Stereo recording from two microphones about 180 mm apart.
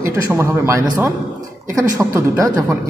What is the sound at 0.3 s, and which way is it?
A man's voice, 15° right (ahead or behind).